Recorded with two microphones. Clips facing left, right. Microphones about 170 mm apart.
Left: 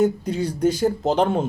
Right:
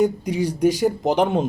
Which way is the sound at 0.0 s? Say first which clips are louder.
Even; 15° right (ahead or behind).